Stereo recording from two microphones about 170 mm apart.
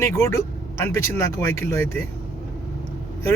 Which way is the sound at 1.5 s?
15° left (ahead or behind).